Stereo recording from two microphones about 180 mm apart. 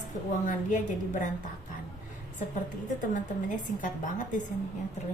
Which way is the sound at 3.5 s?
45° left (ahead or behind).